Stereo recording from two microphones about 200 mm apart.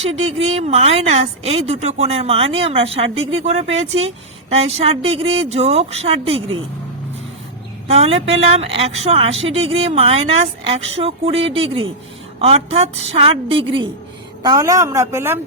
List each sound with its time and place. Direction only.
0.4 s a woman's voice: 30° right (ahead or behind)
7.9 s a woman's voice: 30° right (ahead or behind); by 15.4 s 10° right (ahead or behind)